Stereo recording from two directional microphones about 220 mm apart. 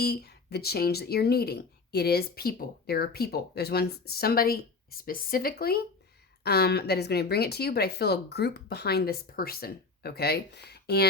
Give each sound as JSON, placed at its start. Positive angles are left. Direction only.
{"t": 0.0, "sound": "speech", "side_deg": 45}